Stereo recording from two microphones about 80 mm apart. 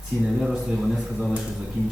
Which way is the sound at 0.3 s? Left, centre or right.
Centre.